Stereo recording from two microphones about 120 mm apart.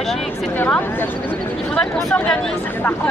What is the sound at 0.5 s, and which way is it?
Speech, 15° left (ahead or behind).